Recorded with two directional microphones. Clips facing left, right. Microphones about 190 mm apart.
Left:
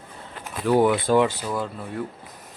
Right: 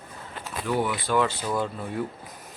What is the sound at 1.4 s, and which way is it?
Speech, centre (ahead or behind).